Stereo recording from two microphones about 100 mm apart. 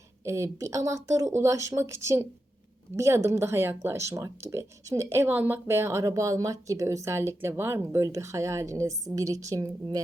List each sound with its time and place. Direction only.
0.3 s speech: 30° right (ahead or behind)